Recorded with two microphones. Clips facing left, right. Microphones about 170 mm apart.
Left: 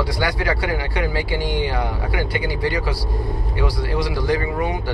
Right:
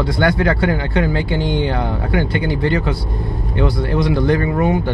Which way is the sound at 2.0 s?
55° right (ahead or behind).